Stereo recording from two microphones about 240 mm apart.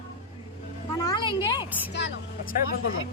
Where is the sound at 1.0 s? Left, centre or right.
Centre.